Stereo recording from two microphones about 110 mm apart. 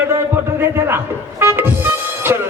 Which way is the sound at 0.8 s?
20° right (ahead or behind).